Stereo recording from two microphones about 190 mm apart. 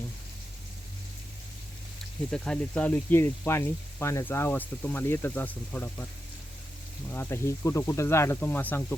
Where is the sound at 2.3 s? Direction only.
5° left (ahead or behind).